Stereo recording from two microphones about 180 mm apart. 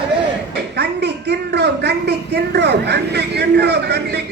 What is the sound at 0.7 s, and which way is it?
A woman's voice, 70° right (ahead or behind).